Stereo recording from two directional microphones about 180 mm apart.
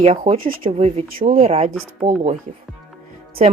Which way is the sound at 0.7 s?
35° right (ahead or behind).